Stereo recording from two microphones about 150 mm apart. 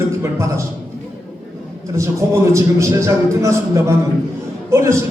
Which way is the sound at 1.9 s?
20° right (ahead or behind).